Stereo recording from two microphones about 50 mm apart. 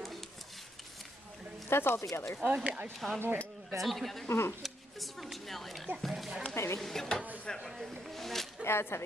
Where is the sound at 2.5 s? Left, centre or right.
Right.